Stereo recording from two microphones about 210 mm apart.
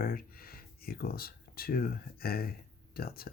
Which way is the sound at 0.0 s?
45° left (ahead or behind).